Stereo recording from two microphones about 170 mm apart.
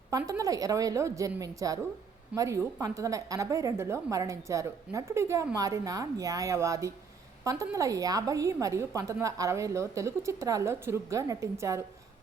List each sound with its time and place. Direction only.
0.1 s a woman's voice: 20° right (ahead or behind)